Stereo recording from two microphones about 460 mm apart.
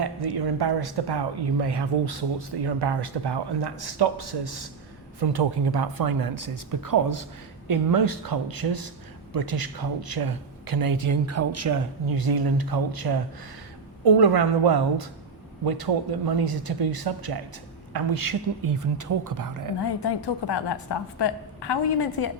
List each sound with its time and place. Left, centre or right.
0.0 s speech: right
12.1 s speech: right
20.0 s a woman's voice: left